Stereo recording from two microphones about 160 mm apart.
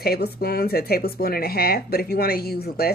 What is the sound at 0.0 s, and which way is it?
Speech, 75° left (ahead or behind).